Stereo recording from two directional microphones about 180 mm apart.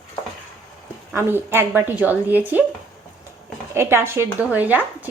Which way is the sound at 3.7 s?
15° right (ahead or behind).